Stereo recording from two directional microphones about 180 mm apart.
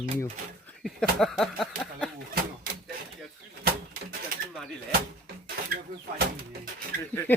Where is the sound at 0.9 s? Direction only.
Centre (ahead or behind).